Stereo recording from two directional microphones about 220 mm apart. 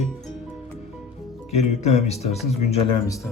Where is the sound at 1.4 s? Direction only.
30° left (ahead or behind).